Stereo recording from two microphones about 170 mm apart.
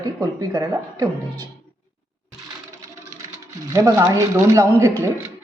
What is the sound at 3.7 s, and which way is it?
Speech, 20° right (ahead or behind).